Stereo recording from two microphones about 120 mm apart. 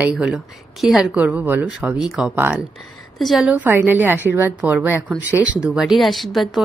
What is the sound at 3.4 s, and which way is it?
A woman's voice, 15° right (ahead or behind).